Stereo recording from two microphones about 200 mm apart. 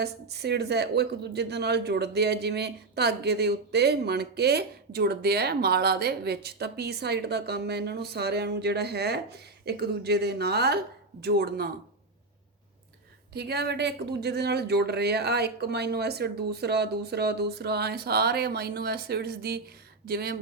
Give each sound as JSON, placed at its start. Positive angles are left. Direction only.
{"t": 0.0, "sound": "a woman's voice", "side_deg": -55}
{"t": 13.3, "sound": "speech", "side_deg": -55}